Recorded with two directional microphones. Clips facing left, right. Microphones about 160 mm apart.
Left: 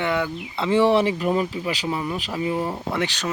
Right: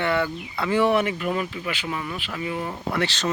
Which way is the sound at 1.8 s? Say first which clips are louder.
Left 4 dB; 25° left (ahead or behind).